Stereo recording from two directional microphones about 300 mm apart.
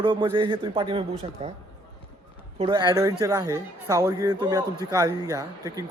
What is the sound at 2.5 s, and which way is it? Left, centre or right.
Speech, centre.